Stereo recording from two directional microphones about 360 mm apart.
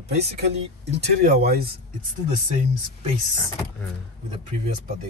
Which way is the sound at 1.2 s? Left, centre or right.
Right.